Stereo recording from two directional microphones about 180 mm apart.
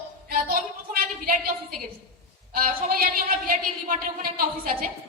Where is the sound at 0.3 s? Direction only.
55° right (ahead or behind).